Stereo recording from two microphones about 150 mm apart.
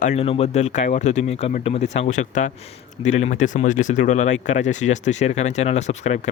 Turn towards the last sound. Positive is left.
turn(degrees=50)  # may be behind; listen again after turning